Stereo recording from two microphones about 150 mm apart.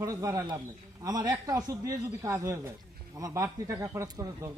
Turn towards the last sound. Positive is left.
turn(degrees=-25)  # may be behind; listen again after turning